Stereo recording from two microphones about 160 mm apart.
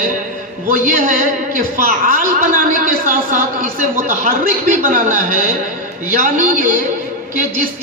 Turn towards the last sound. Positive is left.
turn(degrees=-60)  # may be behind; listen again after turning